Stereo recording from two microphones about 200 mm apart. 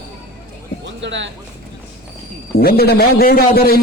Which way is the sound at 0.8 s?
65° right (ahead or behind).